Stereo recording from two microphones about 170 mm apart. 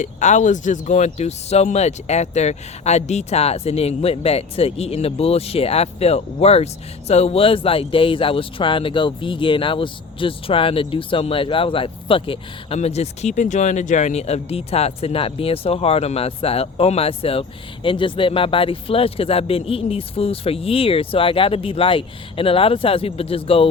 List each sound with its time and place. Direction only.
0.0 s speech: 45° left (ahead or behind)